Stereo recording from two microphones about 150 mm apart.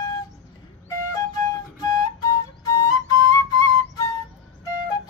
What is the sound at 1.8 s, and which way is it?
Flute, 25° left (ahead or behind).